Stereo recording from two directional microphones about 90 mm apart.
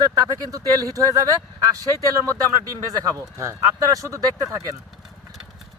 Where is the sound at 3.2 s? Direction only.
30° right (ahead or behind).